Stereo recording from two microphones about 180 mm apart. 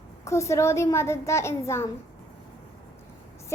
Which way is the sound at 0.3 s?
15° left (ahead or behind).